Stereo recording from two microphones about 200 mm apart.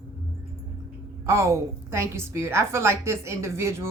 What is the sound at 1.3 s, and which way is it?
A woman's voice, 15° right (ahead or behind).